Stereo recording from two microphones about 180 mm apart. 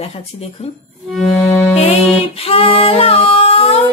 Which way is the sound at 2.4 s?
30° left (ahead or behind).